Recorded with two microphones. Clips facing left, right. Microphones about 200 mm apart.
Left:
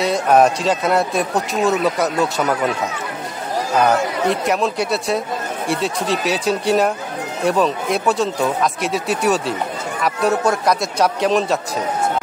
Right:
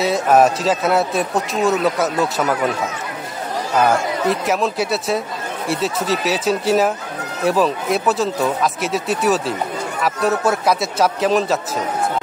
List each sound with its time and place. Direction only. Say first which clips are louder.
0.0 s a man's voice: even; centre (ahead or behind)
3.8 s a man's voice: even; centre (ahead or behind)